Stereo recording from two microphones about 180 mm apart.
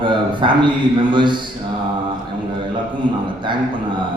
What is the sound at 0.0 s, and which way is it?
A man's voice, 25° right (ahead or behind).